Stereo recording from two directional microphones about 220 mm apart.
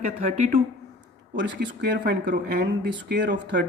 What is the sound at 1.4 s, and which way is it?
Speech, 50° right (ahead or behind).